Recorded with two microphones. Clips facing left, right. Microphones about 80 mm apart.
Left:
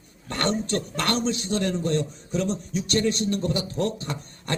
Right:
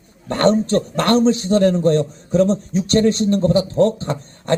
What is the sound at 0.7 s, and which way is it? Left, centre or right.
A man's voice, right.